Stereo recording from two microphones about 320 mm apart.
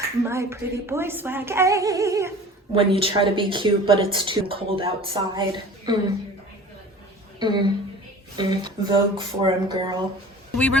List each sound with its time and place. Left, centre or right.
0.2 s a woman's voice: centre
7.3 s a woman's voice: centre